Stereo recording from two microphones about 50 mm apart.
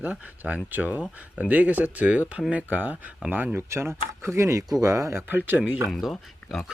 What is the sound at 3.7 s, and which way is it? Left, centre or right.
Speech, right.